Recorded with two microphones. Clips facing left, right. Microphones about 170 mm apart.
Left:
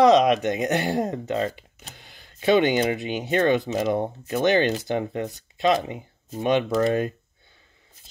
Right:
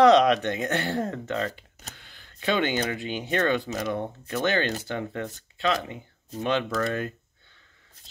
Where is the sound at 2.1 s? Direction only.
20° left (ahead or behind).